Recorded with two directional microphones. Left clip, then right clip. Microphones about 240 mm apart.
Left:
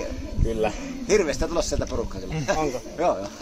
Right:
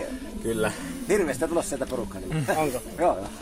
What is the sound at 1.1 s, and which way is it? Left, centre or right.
Speech, left.